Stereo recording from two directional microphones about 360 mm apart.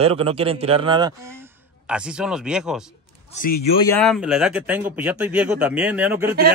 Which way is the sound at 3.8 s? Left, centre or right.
Centre.